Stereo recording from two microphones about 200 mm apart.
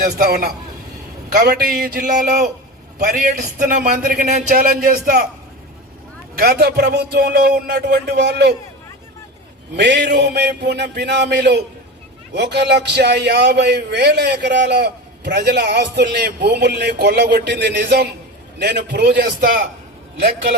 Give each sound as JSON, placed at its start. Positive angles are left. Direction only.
{"t": 0.0, "sound": "a man's voice", "side_deg": -45}
{"t": 6.3, "sound": "a man's voice", "side_deg": -50}
{"t": 7.3, "sound": "a man's voice", "side_deg": -45}
{"t": 9.7, "sound": "a man's voice", "side_deg": -60}